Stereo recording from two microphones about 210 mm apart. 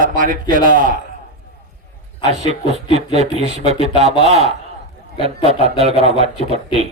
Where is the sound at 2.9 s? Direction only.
30° right (ahead or behind).